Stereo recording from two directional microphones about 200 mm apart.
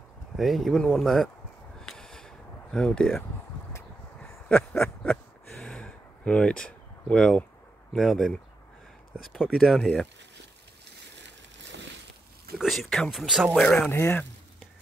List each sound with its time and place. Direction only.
0.4 s speech: centre (ahead or behind)
1.8 s a sound: 5° left (ahead or behind)
4.5 s a sound: 5° left (ahead or behind)
7.9 s speech: centre (ahead or behind)
11.2 s vehicle: 60° right (ahead or behind)
12.5 s speech: centre (ahead or behind)
13.6 s speech: 5° left (ahead or behind)